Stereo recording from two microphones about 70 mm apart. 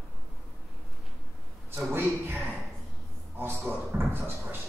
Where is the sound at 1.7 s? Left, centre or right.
Right.